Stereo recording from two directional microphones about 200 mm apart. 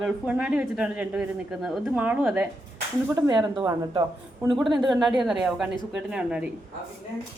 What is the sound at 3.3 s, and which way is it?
A woman's voice, 20° right (ahead or behind).